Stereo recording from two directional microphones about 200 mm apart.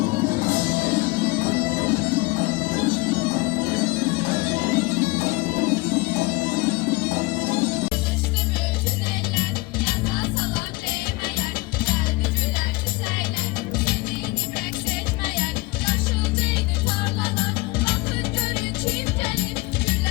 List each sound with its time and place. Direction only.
0.0 s music: 45° right (ahead or behind)
7.6 s music: 10° right (ahead or behind)